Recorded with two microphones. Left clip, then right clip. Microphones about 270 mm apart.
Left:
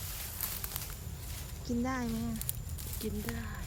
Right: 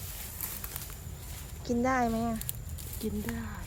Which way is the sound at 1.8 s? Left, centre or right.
Centre.